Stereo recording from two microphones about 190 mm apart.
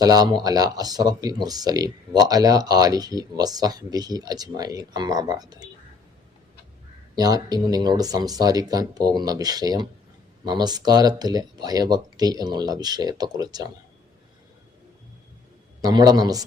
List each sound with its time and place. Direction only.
0.0 s speech: 20° right (ahead or behind)
7.2 s speech: 20° right (ahead or behind)
15.8 s speech: 20° right (ahead or behind)